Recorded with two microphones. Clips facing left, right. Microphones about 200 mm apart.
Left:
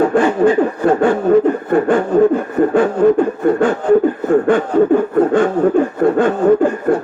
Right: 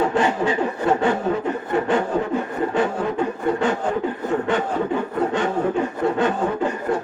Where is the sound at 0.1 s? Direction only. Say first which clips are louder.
Left 8 dB; 50° left (ahead or behind).